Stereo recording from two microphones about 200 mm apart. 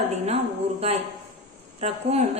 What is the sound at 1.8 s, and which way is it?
Speech, 35° right (ahead or behind).